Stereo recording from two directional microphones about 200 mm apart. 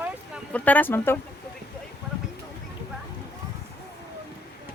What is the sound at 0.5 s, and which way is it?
Speech, 10° left (ahead or behind).